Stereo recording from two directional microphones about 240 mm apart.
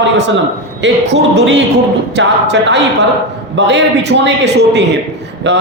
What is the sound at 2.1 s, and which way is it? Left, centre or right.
Speech, right.